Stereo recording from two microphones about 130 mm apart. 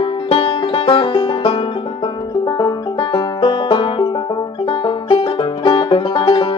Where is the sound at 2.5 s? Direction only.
35° left (ahead or behind).